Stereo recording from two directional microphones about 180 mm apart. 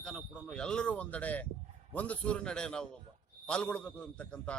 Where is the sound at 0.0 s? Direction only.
5° left (ahead or behind).